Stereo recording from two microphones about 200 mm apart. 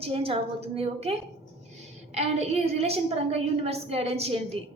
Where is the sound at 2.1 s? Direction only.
30° right (ahead or behind).